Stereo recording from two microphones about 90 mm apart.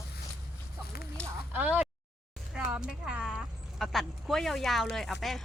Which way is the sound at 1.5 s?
20° right (ahead or behind).